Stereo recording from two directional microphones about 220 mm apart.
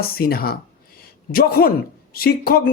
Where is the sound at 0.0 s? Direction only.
45° left (ahead or behind).